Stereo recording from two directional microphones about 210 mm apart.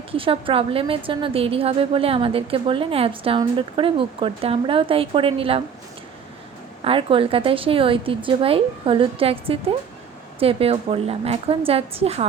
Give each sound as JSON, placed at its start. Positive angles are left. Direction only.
{"t": 0.1, "sound": "a woman's voice", "side_deg": -25}
{"t": 6.8, "sound": "a woman's voice", "side_deg": -25}